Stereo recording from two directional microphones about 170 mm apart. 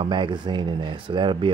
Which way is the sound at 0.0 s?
30° right (ahead or behind).